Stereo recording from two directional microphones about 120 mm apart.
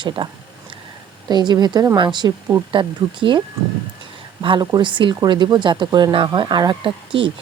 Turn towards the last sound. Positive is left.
turn(degrees=-45)  # may be behind; listen again after turning